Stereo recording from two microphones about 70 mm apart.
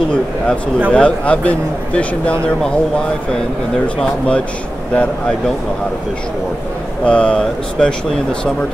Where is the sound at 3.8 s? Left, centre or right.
Centre.